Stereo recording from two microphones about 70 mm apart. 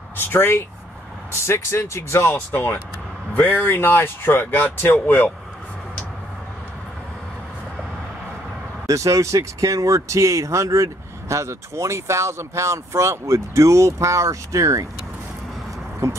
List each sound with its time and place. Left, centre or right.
0.2 s speech: left
8.8 s speech: right